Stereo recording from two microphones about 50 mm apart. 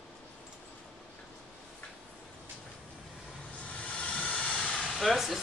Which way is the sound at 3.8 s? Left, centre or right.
Left.